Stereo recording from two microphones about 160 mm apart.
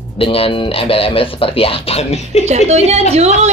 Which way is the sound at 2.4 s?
45° right (ahead or behind).